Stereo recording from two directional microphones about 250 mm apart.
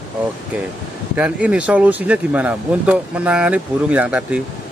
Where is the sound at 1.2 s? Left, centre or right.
Centre.